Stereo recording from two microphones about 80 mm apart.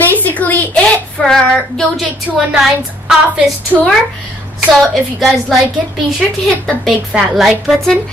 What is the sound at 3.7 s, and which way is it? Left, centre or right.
Speech, right.